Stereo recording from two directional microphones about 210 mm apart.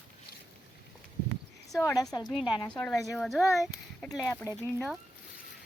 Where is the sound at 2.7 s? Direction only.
5° left (ahead or behind).